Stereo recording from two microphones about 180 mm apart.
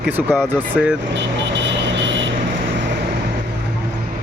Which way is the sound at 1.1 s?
80° right.